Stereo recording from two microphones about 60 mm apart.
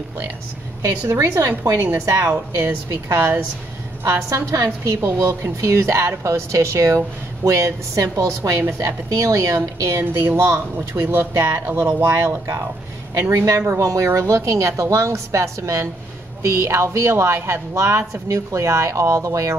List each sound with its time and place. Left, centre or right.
0.8 s a woman's voice: right
1.6 s a woman's voice: right
4.0 s a woman's voice: right
4.6 s a woman's voice: right
8.6 s a woman's voice: right
9.1 s a woman's voice: right
10.3 s a woman's voice: right
11.3 s a woman's voice: right
11.7 s a woman's voice: right
13.6 s a woman's voice: right